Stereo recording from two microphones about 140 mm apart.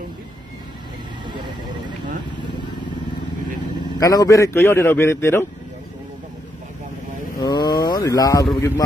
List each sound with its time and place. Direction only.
4.0 s a man's voice: 25° left (ahead or behind)
7.3 s a sound: 30° left (ahead or behind)
8.5 s a man's voice: 20° left (ahead or behind)